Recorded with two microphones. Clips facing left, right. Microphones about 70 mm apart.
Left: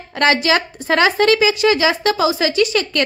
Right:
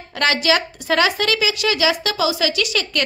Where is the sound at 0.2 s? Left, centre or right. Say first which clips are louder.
Left 3 dB; left.